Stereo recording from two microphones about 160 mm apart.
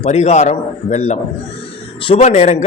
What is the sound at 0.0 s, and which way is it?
A man's voice, 45° left (ahead or behind).